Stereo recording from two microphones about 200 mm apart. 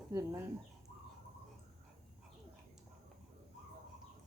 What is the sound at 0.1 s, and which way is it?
Speech, 15° right (ahead or behind).